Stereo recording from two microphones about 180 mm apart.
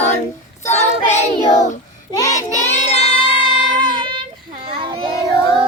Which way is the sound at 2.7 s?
35° left (ahead or behind).